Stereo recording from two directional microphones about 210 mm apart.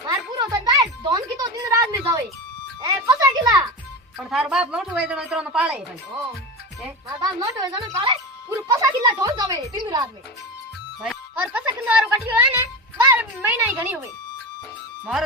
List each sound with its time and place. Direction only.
0.3 s music: 15° right (ahead or behind)
4.2 s a woman's voice: 5° right (ahead or behind)
7.3 s speech: 20° right (ahead or behind)
11.0 s speech: 5° right (ahead or behind)